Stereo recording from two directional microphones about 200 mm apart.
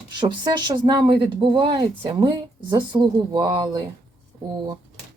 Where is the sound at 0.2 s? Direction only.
25° right (ahead or behind).